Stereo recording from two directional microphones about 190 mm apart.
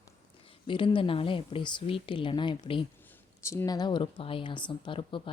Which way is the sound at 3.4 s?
15° left (ahead or behind).